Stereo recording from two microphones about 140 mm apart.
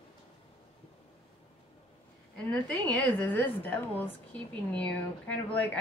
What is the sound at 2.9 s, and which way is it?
A woman's voice, 15° left (ahead or behind).